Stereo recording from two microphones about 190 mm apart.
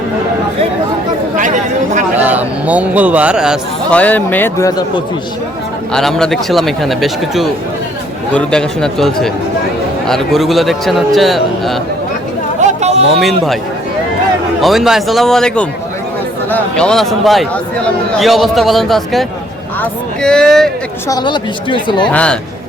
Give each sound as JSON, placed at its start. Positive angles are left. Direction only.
{"t": 1.4, "sound": "speech", "side_deg": -40}
{"t": 2.1, "sound": "a man's voice", "side_deg": -10}
{"t": 3.9, "sound": "speech", "side_deg": 10}
{"t": 5.9, "sound": "speech", "side_deg": 5}
{"t": 12.5, "sound": "a sound", "side_deg": -35}
{"t": 13.1, "sound": "speech", "side_deg": 0}
{"t": 14.6, "sound": "speech", "side_deg": 0}
{"t": 21.1, "sound": "speech", "side_deg": 20}
{"t": 22.1, "sound": "speech", "side_deg": 5}